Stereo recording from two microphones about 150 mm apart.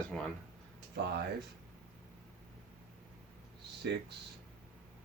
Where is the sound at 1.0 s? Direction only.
90° right.